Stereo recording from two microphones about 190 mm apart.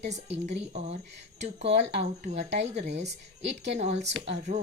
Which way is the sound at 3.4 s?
65° right (ahead or behind).